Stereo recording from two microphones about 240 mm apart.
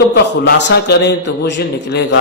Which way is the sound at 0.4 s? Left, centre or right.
Left.